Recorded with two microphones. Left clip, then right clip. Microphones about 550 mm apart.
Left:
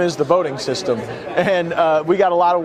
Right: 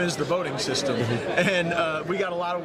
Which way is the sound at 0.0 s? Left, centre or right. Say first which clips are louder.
Left 9 dB; left.